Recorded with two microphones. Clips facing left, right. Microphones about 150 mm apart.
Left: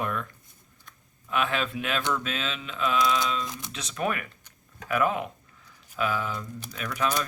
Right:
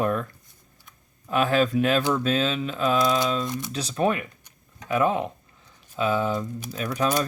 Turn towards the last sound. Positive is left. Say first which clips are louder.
# right 4 dB
turn(degrees=-35)  # may be behind; listen again after turning